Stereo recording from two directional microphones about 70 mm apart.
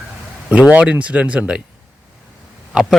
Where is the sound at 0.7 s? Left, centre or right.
Right.